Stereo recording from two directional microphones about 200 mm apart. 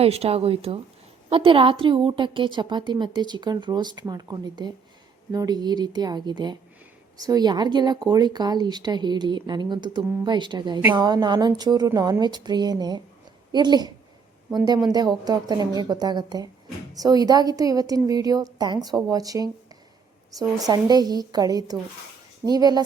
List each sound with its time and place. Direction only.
0.0 s speech: 30° right (ahead or behind)
20.6 s speech: 20° right (ahead or behind)